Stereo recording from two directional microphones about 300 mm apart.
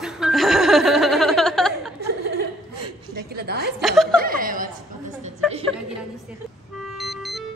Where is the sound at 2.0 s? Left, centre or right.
Right.